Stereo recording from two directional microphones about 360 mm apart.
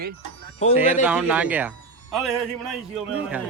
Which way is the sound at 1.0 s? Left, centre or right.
Centre.